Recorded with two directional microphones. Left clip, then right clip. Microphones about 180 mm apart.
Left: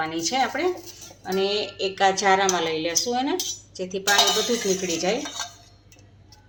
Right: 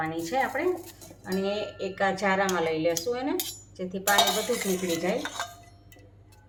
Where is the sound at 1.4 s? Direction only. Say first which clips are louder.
Left 5 dB; 60° left (ahead or behind).